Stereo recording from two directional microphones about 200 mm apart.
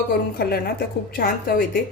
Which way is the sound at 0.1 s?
50° left (ahead or behind).